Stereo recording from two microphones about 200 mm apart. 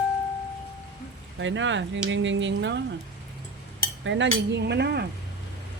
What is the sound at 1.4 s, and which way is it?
Speech, 65° right (ahead or behind).